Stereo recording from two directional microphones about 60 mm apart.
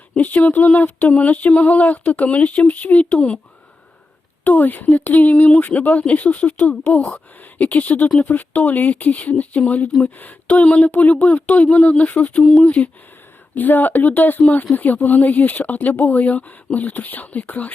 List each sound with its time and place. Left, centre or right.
0.2 s speech: left
4.4 s speech: left